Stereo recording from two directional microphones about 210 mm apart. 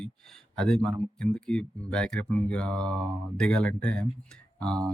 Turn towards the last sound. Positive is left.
turn(degrees=5)  # may be behind; listen again after turning